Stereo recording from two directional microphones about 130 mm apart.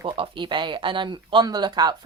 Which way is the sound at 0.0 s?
40° right (ahead or behind).